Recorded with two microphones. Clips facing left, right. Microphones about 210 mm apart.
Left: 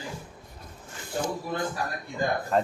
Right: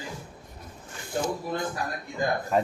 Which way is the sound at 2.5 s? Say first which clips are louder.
Even; 5° right (ahead or behind).